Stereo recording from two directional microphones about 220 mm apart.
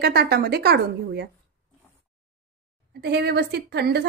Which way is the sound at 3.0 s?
50° right (ahead or behind).